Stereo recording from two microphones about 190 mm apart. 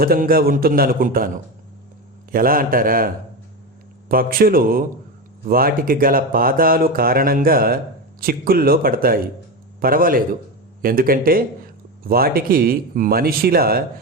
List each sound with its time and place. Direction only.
0.0 s speech: 50° right (ahead or behind)
2.3 s speech: 50° right (ahead or behind)
4.1 s speech: 50° right (ahead or behind)